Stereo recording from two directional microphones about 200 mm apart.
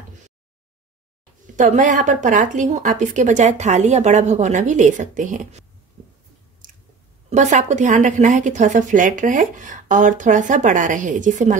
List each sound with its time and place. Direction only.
1.6 s a woman's voice: 40° right (ahead or behind)
7.2 s a woman's voice: 35° right (ahead or behind)